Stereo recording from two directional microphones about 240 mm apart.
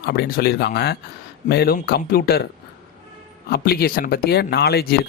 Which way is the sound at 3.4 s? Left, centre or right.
Left.